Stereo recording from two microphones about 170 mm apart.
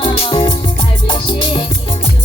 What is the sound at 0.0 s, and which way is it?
Music, 30° left (ahead or behind).